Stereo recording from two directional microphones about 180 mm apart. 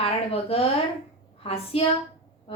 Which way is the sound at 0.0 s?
35° left (ahead or behind).